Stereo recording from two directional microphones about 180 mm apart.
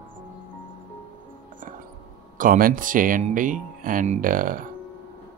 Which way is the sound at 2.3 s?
50° right (ahead or behind).